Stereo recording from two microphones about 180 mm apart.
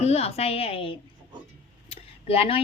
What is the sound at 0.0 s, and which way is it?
A woman's voice, 35° left (ahead or behind).